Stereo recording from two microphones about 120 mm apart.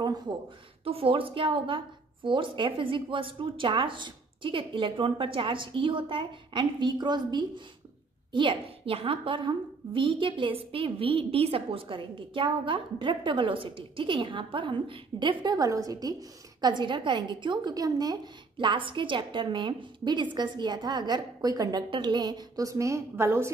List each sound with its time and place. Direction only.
0.8 s a woman's voice: 50° right (ahead or behind); by 18.1 s 30° right (ahead or behind)
18.6 s a woman's voice: 45° right (ahead or behind); by 23.5 s 20° right (ahead or behind)